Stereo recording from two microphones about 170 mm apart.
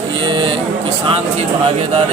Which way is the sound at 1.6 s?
40° right (ahead or behind).